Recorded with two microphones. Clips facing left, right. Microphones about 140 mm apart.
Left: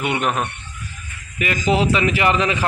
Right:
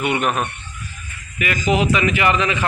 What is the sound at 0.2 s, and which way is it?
Speech, 15° right (ahead or behind).